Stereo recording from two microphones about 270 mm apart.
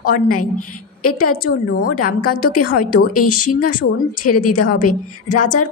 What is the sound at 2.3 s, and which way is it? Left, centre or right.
A woman's voice, left.